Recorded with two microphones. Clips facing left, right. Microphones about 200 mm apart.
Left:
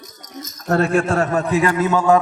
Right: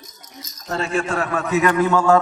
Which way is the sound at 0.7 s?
55° left (ahead or behind).